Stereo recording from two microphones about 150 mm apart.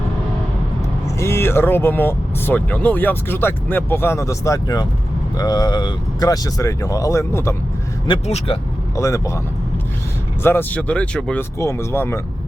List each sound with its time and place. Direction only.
1.2 s speech: 15° left (ahead or behind)
8.0 s speech: 40° left (ahead or behind)
9.0 s speech: 20° left (ahead or behind)
10.4 s speech: 15° left (ahead or behind)
11.6 s speech: 20° left (ahead or behind)